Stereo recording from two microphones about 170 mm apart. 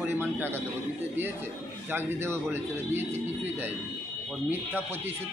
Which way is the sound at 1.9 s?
15° right (ahead or behind).